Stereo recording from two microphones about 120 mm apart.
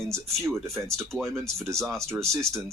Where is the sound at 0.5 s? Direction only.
25° right (ahead or behind).